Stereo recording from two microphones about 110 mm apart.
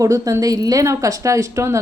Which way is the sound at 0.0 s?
30° right (ahead or behind).